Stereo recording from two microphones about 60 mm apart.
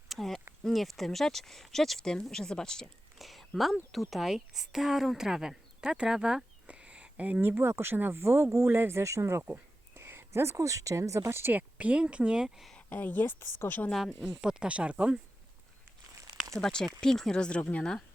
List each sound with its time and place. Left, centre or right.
0.1 s a sound: centre
0.6 s speech: centre
3.2 s speech: centre; by 9.4 s right
9.9 s speech: right
11.3 s a woman's voice: right
11.5 s speech: right; by 12.7 s centre
12.9 s a woman's voice: left
14.2 s speech: centre
16.6 s speech: centre
17.6 s a woman's voice: left